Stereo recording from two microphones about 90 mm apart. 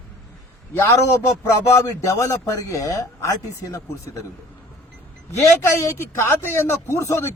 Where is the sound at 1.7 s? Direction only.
35° left (ahead or behind).